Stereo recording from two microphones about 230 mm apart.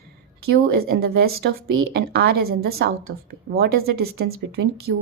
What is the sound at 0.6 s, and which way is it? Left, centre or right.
Speech, right.